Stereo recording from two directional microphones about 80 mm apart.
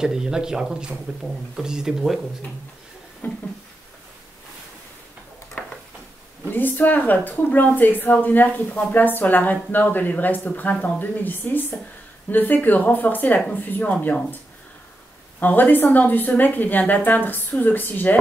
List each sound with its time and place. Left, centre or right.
0.0 s speech: centre
3.2 s speech: left
6.4 s speech: left
15.4 s speech: left